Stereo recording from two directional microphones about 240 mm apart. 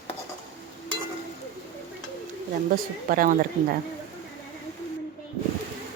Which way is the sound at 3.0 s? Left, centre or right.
Right.